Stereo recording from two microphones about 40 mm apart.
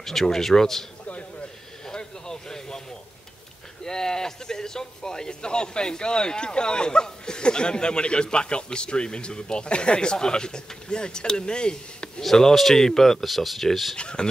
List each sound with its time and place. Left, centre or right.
0.0 s speech: centre
1.9 s a sound: centre
3.8 s speech: centre
12.2 s speech: centre
13.9 s speech: left